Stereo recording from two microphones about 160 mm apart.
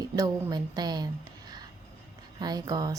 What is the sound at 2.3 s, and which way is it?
Speech, 25° right (ahead or behind).